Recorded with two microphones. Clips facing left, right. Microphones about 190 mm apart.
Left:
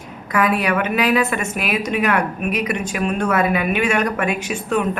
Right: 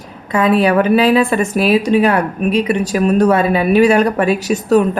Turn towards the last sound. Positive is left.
turn(degrees=-40)  # may be behind; listen again after turning